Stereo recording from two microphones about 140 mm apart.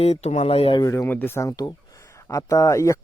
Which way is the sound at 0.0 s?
50° left (ahead or behind).